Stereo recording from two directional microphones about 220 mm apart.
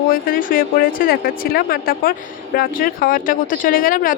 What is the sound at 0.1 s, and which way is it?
A woman's voice, 40° left (ahead or behind).